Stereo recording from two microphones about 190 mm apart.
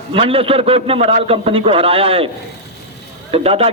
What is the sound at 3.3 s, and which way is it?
Speech, 30° right (ahead or behind).